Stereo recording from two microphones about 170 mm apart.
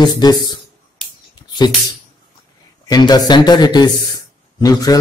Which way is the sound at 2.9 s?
25° left (ahead or behind).